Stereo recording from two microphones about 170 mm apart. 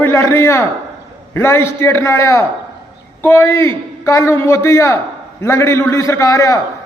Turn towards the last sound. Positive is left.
turn(degrees=20)  # may be behind; listen again after turning